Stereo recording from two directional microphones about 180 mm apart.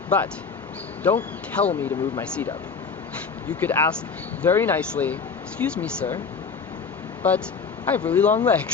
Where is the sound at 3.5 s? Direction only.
10° left (ahead or behind).